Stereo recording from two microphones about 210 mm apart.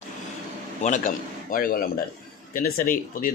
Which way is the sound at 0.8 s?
35° left (ahead or behind).